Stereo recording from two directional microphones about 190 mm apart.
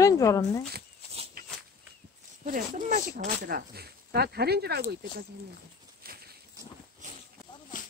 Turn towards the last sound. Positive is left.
turn(degrees=-50)  # may be behind; listen again after turning